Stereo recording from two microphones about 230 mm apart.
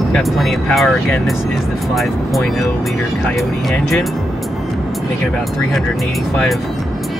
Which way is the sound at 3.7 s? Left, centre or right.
Centre.